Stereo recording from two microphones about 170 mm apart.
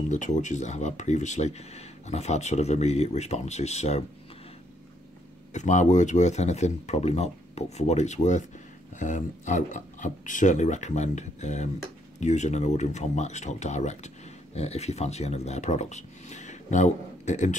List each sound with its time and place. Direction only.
0.1 s speech: 45° left (ahead or behind)
5.5 s speech: 45° left (ahead or behind)